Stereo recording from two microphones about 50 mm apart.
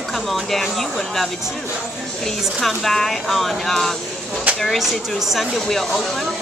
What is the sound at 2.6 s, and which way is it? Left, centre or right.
Speech, centre.